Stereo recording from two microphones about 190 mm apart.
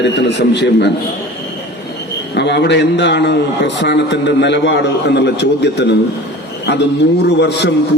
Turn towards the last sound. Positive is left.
turn(degrees=65)  # may be behind; listen again after turning